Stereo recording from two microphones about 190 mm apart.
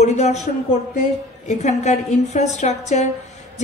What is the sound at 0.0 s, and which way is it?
A man's voice, 35° left (ahead or behind).